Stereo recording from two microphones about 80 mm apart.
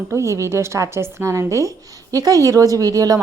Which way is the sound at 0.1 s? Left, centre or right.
Right.